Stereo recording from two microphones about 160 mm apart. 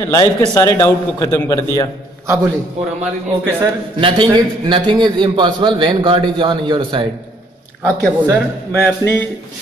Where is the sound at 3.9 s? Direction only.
30° right (ahead or behind).